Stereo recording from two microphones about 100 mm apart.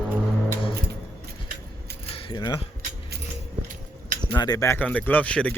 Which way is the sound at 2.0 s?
65° left (ahead or behind).